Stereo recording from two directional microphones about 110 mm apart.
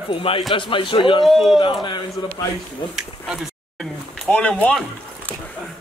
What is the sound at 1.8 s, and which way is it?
Speech, 40° left (ahead or behind).